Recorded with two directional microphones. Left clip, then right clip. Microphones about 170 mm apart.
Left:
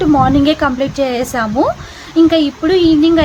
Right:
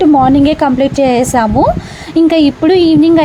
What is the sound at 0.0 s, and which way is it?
A woman's voice, 30° right (ahead or behind).